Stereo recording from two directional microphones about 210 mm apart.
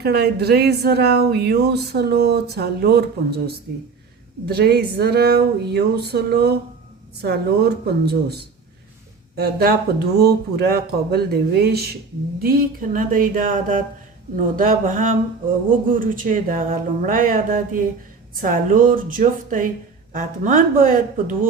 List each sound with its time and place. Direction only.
0.0 s speech: 50° right (ahead or behind)